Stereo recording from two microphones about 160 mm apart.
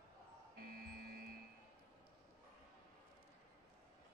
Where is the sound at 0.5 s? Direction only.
70° right (ahead or behind).